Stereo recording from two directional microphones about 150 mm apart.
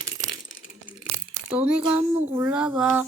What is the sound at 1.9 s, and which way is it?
Speech, 15° right (ahead or behind).